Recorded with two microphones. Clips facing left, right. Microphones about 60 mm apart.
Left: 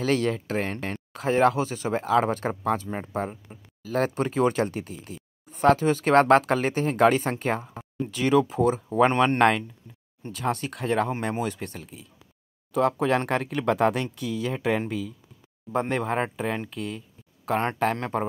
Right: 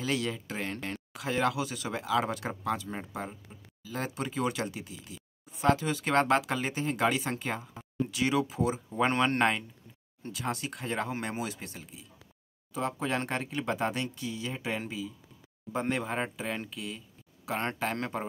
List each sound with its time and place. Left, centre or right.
0.0 s speech: left
3.3 s speech: left
15.7 s speech: left